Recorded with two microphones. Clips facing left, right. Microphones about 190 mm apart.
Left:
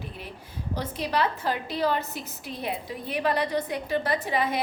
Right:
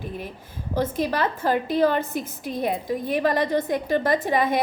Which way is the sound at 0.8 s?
45° right (ahead or behind).